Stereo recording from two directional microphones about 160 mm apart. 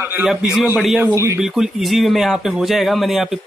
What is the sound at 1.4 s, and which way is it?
Speech, centre (ahead or behind).